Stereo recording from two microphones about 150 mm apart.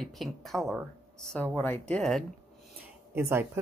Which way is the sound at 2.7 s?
15° right (ahead or behind).